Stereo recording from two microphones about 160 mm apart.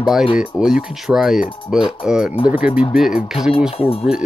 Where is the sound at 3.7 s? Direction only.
35° left (ahead or behind).